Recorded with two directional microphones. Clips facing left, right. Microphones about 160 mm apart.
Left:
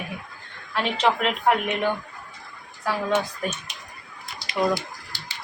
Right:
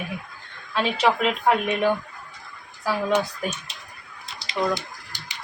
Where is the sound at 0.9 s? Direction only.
10° right (ahead or behind).